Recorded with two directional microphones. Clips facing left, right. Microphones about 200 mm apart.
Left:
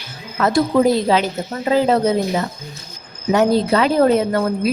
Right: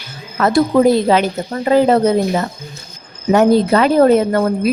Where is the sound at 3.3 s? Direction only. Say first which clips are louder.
Right 4 dB; 55° right (ahead or behind).